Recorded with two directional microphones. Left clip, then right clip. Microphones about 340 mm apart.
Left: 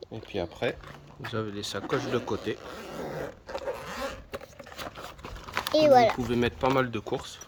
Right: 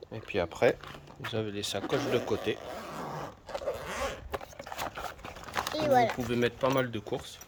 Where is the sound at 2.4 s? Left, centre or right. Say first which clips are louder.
Right 1 dB; centre.